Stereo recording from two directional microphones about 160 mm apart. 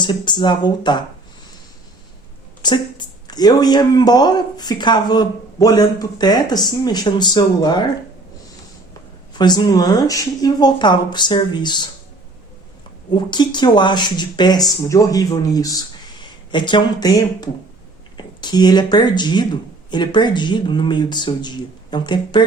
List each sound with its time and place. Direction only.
0.0 s speech: 30° left (ahead or behind)
2.6 s speech: 25° left (ahead or behind)
9.3 s speech: 25° left (ahead or behind)
13.1 s speech: 25° left (ahead or behind)